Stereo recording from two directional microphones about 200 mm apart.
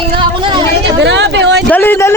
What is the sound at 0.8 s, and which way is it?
Speech, 65° right (ahead or behind).